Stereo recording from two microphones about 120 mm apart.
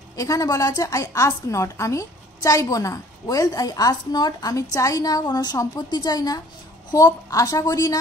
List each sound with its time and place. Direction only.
0.1 s a woman's voice: 30° left (ahead or behind)